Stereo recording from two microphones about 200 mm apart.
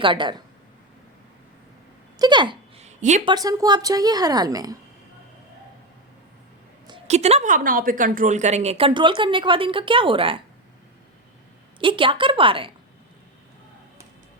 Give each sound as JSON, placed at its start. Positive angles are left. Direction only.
{"t": 0.0, "sound": "a woman's voice", "side_deg": -25}
{"t": 2.1, "sound": "a sound", "side_deg": -20}
{"t": 3.2, "sound": "a woman's voice", "side_deg": -20}
{"t": 6.8, "sound": "a woman's voice", "side_deg": -30}
{"t": 11.8, "sound": "a woman's voice", "side_deg": -25}